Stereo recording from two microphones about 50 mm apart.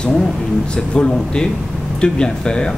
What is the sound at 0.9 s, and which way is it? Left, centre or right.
Speech, centre.